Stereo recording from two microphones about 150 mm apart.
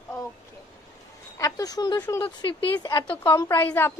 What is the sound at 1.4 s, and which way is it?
A woman's voice, 25° left (ahead or behind).